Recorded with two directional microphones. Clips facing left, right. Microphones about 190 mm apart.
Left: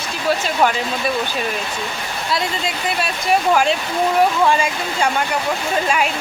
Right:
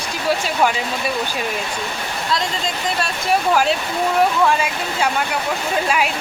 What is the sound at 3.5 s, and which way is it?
Speech, 5° right (ahead or behind).